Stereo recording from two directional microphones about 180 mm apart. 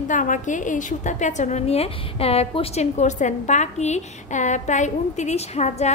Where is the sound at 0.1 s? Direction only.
45° left (ahead or behind).